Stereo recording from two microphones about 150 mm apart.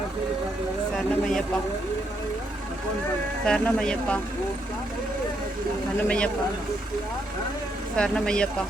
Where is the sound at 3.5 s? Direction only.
5° left (ahead or behind).